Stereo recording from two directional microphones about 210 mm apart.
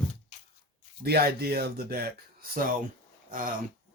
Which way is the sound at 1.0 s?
50° right (ahead or behind).